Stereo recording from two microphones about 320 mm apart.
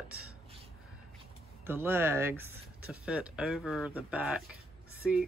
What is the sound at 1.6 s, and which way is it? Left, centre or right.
Speech, centre.